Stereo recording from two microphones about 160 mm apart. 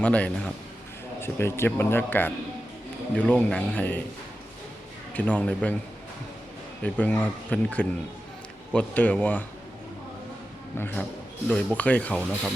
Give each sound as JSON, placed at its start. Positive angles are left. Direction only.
{"t": 0.0, "sound": "speech", "side_deg": 10}
{"t": 5.1, "sound": "speech", "side_deg": 10}
{"t": 6.8, "sound": "speech", "side_deg": 10}
{"t": 10.8, "sound": "speech", "side_deg": 15}